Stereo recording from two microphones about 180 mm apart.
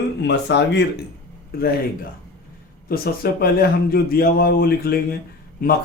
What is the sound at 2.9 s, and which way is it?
Speech, 60° left (ahead or behind).